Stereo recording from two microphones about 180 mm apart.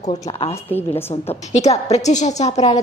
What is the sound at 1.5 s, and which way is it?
A woman's voice, 40° left (ahead or behind).